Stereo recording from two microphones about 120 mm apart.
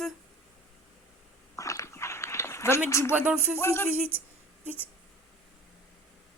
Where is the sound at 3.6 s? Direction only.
20° left (ahead or behind).